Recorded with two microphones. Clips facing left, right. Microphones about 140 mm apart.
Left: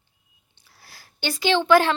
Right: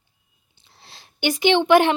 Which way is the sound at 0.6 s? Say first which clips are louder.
Right 2 dB; 25° right (ahead or behind).